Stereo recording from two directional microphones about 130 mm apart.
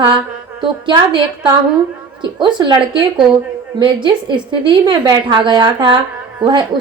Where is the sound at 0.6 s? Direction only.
35° right (ahead or behind).